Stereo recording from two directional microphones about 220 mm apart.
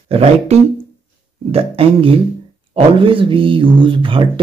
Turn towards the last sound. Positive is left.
turn(degrees=-20)  # may be behind; listen again after turning